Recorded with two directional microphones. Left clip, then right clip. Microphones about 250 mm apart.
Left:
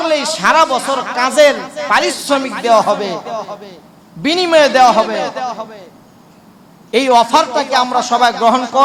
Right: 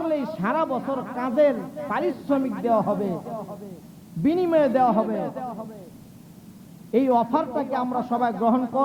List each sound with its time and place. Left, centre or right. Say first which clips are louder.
0.0 s speech: left 12 dB; centre
6.9 s speech: left 11 dB; centre